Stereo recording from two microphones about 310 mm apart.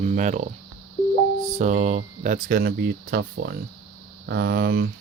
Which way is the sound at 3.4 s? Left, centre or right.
Right.